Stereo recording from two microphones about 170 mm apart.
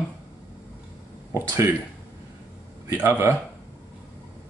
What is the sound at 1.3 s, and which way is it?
Speech, 15° right (ahead or behind).